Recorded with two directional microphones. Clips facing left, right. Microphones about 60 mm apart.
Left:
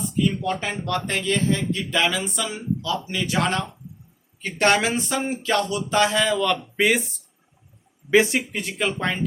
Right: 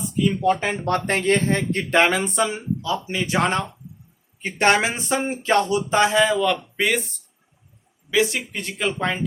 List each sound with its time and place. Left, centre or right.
0.2 s speech: centre
0.9 s speech: right
4.4 s a sound: right
6.2 s speech: centre
8.1 s speech: left
8.4 s speech: centre